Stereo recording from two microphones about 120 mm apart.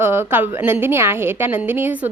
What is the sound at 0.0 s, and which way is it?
A woman's voice, 15° right (ahead or behind).